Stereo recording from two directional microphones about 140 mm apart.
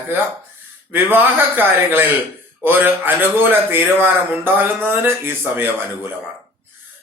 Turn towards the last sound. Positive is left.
turn(degrees=-15)  # may be behind; listen again after turning